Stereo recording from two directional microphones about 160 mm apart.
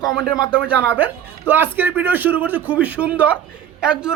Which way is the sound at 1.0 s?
10° right (ahead or behind).